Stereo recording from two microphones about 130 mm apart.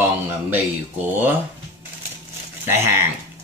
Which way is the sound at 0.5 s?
15° right (ahead or behind).